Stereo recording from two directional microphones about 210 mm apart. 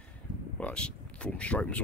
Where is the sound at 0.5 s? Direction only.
5° left (ahead or behind).